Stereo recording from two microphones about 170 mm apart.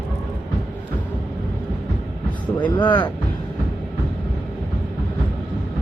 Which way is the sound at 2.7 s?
30° left (ahead or behind).